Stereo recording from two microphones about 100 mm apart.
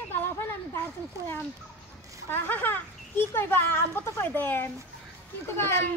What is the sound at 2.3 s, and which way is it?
A woman's voice, 20° left (ahead or behind).